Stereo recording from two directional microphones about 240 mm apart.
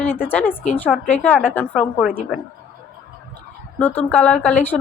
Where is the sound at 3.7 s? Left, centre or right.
Centre.